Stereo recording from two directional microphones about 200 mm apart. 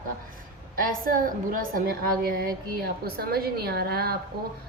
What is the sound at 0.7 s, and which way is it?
A woman's voice, 45° right (ahead or behind).